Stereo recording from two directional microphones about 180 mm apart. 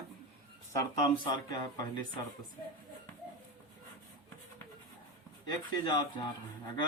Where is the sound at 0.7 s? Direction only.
25° left (ahead or behind).